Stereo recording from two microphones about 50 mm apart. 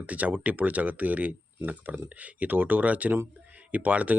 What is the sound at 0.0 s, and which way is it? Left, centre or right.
Speech, right.